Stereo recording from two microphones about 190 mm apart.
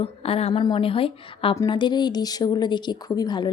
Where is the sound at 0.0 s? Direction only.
30° left (ahead or behind).